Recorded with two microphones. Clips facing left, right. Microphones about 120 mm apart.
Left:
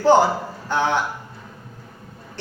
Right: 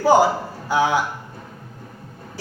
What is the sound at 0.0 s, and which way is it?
A man's voice, 10° right (ahead or behind).